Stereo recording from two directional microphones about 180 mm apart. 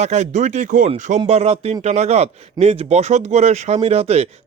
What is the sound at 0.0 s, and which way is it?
A man's voice, 40° right (ahead or behind).